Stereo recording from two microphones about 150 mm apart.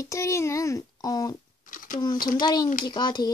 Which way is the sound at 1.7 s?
65° left (ahead or behind).